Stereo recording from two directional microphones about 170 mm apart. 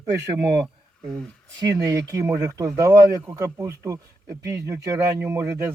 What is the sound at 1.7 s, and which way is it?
Speech, 20° right (ahead or behind).